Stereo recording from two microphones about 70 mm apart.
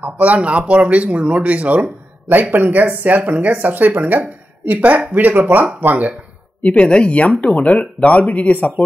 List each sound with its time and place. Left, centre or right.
0.2 s speech: centre
6.6 s speech: centre